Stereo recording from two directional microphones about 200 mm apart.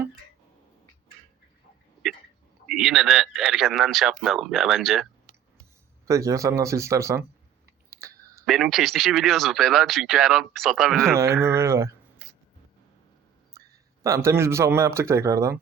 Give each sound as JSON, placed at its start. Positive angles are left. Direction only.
{"t": 2.6, "sound": "speech", "side_deg": 0}
{"t": 6.1, "sound": "speech", "side_deg": -15}
{"t": 7.9, "sound": "clicking", "side_deg": -15}
{"t": 8.4, "sound": "speech", "side_deg": 0}
{"t": 11.1, "sound": "speech", "side_deg": -15}
{"t": 14.0, "sound": "speech", "side_deg": -15}